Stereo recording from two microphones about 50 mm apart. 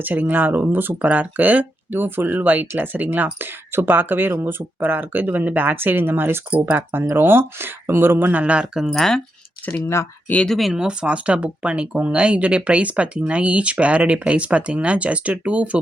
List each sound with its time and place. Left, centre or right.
0.0 s speech: right
3.3 s speech: right
6.5 s speech: right
6.9 s speech: right
8.3 s speech: right
8.9 s speech: centre
9.8 s speech: left
10.7 s speech: centre